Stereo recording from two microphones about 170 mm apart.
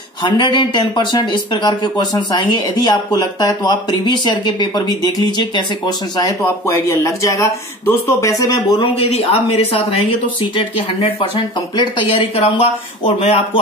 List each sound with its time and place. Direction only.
0.2 s speech: 30° left (ahead or behind)
8.9 s speech: 35° left (ahead or behind)